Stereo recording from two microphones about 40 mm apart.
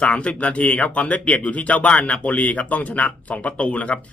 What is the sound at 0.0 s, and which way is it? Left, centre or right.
Speech, left.